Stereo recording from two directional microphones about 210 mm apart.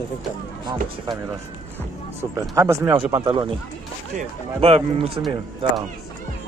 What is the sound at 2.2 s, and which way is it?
A man's voice, 15° right (ahead or behind).